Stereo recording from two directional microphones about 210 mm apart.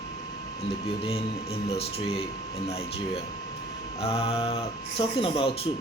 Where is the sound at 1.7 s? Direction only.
30° left (ahead or behind).